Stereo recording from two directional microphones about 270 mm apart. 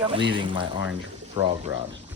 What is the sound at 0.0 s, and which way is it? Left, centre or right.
Speech, centre.